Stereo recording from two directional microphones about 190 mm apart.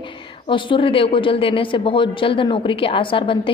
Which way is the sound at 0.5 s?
25° left (ahead or behind).